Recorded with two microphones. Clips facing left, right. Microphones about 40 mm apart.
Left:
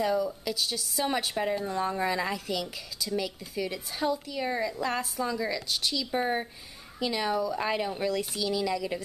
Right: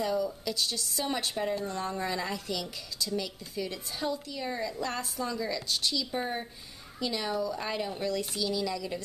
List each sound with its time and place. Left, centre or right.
0.0 s speech: centre
6.1 s a woman's voice: centre